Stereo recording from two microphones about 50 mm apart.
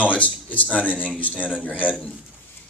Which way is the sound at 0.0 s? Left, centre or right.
Left.